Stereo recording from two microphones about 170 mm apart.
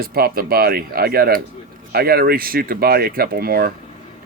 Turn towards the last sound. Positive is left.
turn(degrees=-60)  # may be behind; listen again after turning